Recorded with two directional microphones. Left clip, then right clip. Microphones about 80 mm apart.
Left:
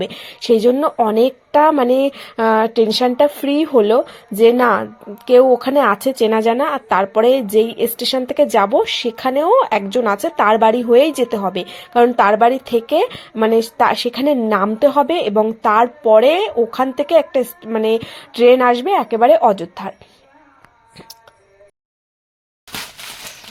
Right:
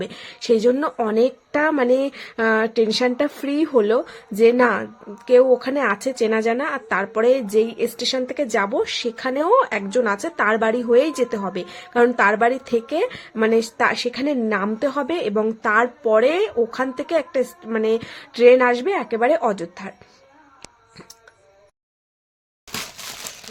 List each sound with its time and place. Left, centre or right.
0.0 s a woman's voice: left
1.0 s a woman's voice: left
15.4 s a woman's voice: centre